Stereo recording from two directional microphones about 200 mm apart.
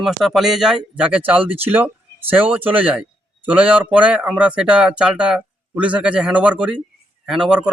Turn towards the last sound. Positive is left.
turn(degrees=-5)  # may be behind; listen again after turning